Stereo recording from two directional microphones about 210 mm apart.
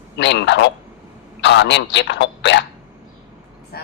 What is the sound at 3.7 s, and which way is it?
Speech, 45° left (ahead or behind).